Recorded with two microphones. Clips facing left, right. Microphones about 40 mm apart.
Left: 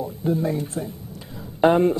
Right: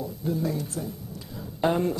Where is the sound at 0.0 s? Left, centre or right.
Left.